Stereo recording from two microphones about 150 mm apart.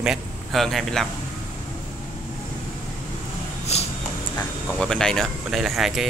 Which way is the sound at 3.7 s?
45° left (ahead or behind).